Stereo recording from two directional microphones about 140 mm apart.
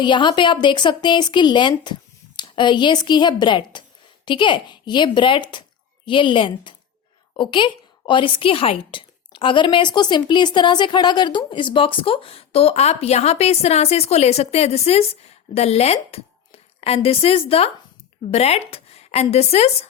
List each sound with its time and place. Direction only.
0.0 s a woman's voice: 35° left (ahead or behind)